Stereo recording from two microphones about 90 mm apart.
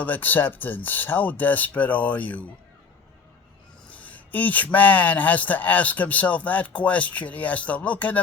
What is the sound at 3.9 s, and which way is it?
Speech, 15° left (ahead or behind).